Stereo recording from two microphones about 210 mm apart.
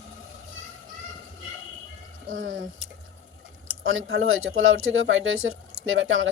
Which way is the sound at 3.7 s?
75° right (ahead or behind).